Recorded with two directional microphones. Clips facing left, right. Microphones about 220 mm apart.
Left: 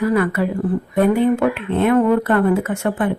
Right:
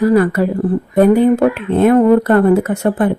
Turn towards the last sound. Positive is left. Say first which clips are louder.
# right 5 dB
turn(degrees=-40)  # may be behind; listen again after turning